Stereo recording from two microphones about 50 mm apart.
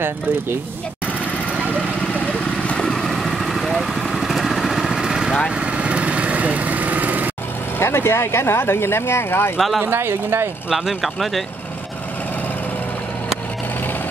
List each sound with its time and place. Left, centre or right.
2.1 s vehicle: left; by 5.4 s centre
5.5 s vehicle: right
7.8 s speech: left
9.8 s speech: right
10.7 s speech: centre